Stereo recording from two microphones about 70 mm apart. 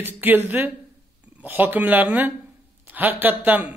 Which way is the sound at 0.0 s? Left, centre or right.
Right.